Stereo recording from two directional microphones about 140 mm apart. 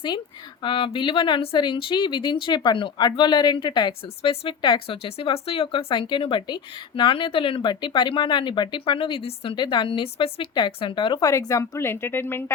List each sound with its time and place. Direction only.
0.6 s speech: 35° left (ahead or behind)
11.3 s speech: 20° left (ahead or behind)